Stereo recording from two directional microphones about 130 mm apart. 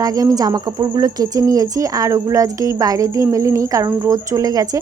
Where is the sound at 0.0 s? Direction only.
25° right (ahead or behind).